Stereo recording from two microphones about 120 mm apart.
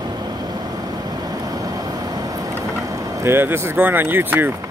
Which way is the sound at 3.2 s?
20° right (ahead or behind).